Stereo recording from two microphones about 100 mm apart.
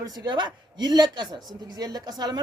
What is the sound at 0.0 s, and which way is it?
A woman's voice, 45° right (ahead or behind).